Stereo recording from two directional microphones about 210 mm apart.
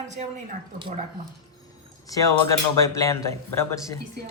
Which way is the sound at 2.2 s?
15° left (ahead or behind).